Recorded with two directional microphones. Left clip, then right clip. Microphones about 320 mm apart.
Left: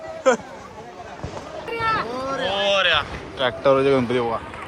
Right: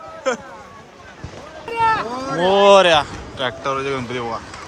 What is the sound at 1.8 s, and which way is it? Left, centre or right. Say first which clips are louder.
Speech: right 5 dB; right.